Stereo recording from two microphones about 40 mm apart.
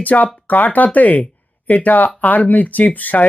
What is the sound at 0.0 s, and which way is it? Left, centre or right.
Speech, left.